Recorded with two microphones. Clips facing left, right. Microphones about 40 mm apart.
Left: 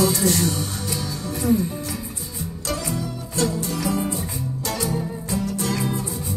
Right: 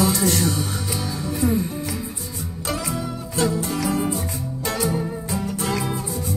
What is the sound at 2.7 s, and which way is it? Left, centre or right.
Music, centre.